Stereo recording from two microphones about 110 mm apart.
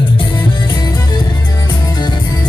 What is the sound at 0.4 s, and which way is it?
Music, 40° left (ahead or behind).